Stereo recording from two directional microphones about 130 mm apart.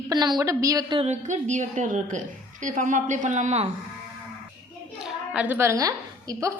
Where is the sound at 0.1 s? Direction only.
30° right (ahead or behind).